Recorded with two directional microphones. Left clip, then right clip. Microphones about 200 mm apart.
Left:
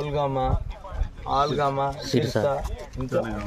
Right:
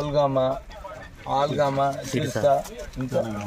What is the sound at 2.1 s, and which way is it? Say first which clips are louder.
Speech: left 3 dB; 65° left (ahead or behind).